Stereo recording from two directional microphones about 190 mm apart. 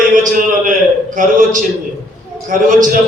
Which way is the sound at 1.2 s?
45° right (ahead or behind).